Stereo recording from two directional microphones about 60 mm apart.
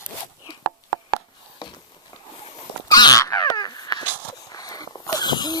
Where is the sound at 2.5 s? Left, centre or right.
Left.